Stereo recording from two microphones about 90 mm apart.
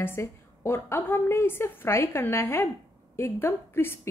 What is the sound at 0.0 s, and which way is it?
A woman's voice, 30° left (ahead or behind).